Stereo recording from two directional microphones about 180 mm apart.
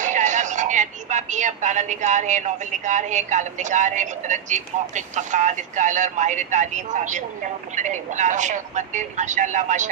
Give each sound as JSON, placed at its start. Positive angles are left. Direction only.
{"t": 0.0, "sound": "speech", "side_deg": -45}